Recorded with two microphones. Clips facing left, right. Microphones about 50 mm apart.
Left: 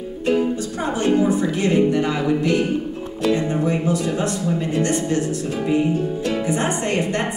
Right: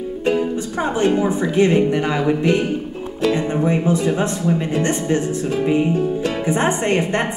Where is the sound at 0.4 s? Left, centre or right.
Right.